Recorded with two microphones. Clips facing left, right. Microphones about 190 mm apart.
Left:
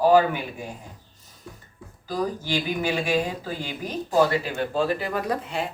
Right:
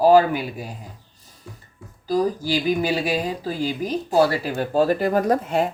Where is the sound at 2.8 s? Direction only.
35° right (ahead or behind).